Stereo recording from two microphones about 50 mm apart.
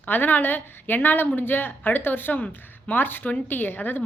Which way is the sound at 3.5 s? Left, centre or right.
Left.